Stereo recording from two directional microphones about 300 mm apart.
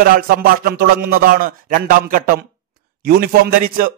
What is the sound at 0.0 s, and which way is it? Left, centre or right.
Speech, right.